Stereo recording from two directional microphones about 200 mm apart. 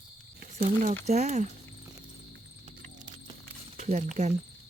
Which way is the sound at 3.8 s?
35° right (ahead or behind).